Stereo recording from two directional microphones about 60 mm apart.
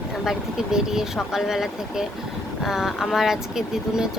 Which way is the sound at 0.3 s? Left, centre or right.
Centre.